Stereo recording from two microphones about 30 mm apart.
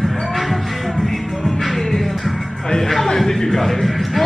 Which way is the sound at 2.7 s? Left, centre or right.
Centre.